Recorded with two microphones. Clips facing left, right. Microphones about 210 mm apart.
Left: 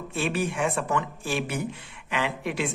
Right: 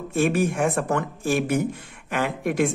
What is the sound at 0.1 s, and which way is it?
Speech, 45° right (ahead or behind).